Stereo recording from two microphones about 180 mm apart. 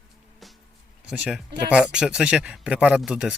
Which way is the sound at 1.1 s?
5° right (ahead or behind).